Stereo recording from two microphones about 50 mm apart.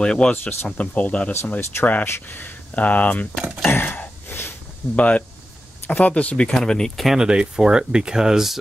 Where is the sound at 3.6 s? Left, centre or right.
Left.